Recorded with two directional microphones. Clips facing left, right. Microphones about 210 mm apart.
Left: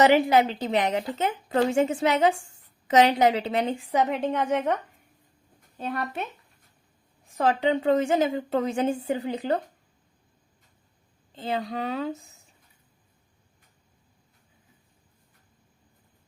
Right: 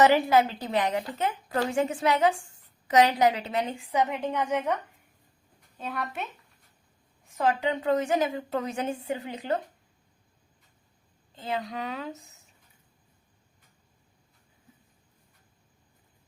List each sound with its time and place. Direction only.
0.0 s a woman's voice: 20° left (ahead or behind)
7.3 s a woman's voice: 30° left (ahead or behind)
11.3 s speech: 30° left (ahead or behind)